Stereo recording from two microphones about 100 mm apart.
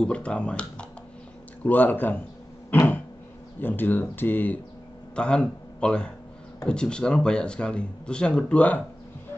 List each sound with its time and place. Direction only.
0.0 s speech: 10° left (ahead or behind)
2.7 s a sound: 20° left (ahead or behind)
3.6 s speech: 20° left (ahead or behind)